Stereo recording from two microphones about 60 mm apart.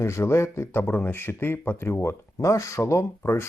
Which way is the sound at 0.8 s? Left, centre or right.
Left.